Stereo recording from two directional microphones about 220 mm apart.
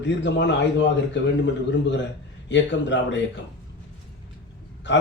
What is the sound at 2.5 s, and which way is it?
Speech, 55° left (ahead or behind).